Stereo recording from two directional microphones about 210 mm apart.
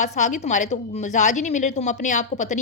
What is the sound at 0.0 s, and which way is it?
A woman's voice, 35° left (ahead or behind).